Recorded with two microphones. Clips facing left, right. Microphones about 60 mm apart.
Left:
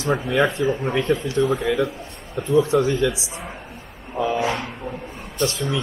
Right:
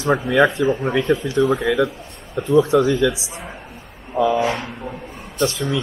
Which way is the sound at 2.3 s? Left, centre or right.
Right.